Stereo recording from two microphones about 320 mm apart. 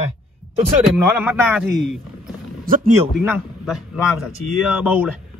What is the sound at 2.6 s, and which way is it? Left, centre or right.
Speech, right.